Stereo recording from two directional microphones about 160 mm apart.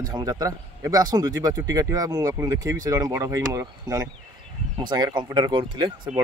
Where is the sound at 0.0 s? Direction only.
25° right (ahead or behind).